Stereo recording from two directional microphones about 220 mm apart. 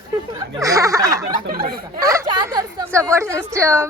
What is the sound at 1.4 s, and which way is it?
Speech, 45° right (ahead or behind).